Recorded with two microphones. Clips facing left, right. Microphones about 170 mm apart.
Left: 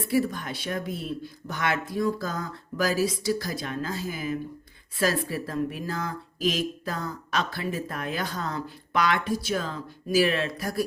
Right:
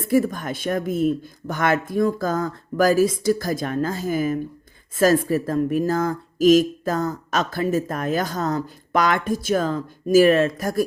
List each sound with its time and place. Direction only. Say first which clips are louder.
0.0 s speech: right 5 dB; 45° right (ahead or behind)